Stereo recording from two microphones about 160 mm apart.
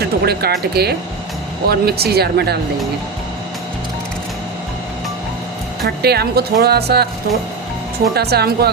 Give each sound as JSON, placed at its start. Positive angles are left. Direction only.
{"t": 0.0, "sound": "music", "side_deg": -85}
{"t": 0.8, "sound": "speech", "side_deg": -80}
{"t": 6.0, "sound": "speech", "side_deg": -85}
{"t": 8.1, "sound": "speech", "side_deg": -85}